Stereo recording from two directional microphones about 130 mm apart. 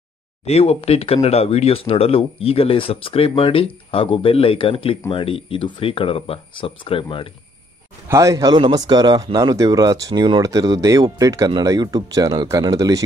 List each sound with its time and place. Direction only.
0.5 s speech: 50° left (ahead or behind)
8.1 s speech: 25° right (ahead or behind)